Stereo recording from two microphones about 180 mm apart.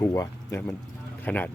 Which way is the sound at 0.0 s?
15° left (ahead or behind).